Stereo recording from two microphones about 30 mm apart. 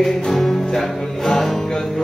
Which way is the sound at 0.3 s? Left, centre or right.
Centre.